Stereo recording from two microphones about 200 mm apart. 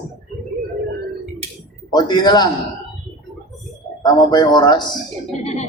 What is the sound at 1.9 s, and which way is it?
Speech, 20° left (ahead or behind).